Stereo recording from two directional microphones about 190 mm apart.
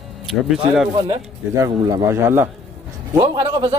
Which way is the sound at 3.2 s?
25° right (ahead or behind).